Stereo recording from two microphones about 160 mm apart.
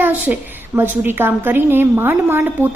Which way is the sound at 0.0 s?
10° right (ahead or behind).